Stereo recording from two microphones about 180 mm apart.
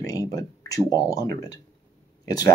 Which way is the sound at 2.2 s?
20° left (ahead or behind).